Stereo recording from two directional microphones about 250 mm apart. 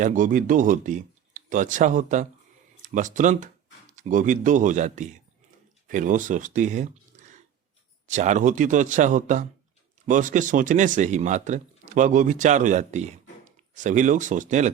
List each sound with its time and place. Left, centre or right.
0.0 s speech: right